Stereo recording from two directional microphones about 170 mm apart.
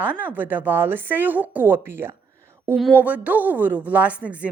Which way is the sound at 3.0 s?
10° right (ahead or behind).